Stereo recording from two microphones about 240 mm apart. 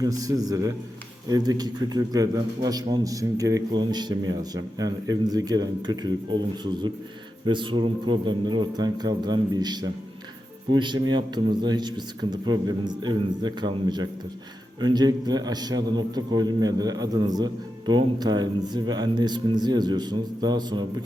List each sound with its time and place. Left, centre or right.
0.0 s a man's voice: centre